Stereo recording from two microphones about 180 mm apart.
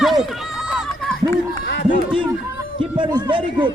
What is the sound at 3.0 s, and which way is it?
Speech, 25° right (ahead or behind).